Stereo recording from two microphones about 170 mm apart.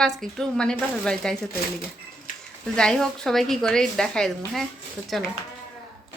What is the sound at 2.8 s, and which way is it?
A woman's voice, 5° left (ahead or behind).